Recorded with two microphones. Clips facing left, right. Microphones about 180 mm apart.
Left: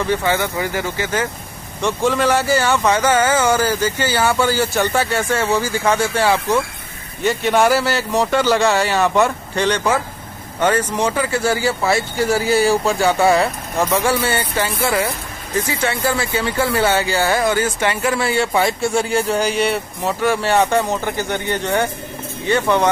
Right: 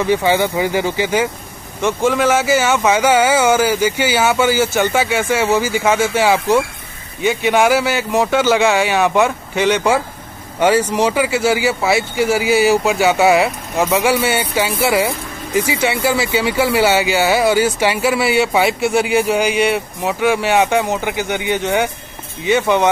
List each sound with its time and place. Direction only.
0.1 s speech: 15° right (ahead or behind)
2.0 s speech: centre (ahead or behind)
20.0 s speech: 10° right (ahead or behind)